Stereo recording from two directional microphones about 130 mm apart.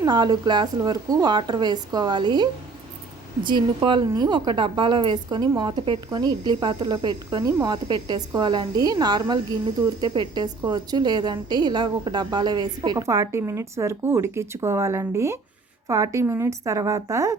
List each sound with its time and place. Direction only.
0.0 s a woman's voice: 30° right (ahead or behind)